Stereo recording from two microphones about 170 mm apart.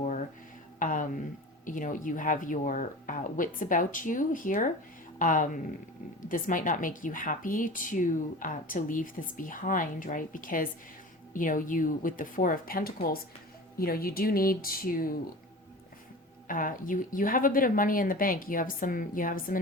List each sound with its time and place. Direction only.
0.0 s music: 45° left (ahead or behind)
0.8 s a sound: 50° left (ahead or behind)
1.6 s a woman's voice: 50° left (ahead or behind)
16.5 s a woman's voice: 55° left (ahead or behind)